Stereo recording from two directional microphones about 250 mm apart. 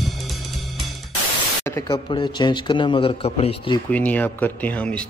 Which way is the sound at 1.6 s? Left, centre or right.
Centre.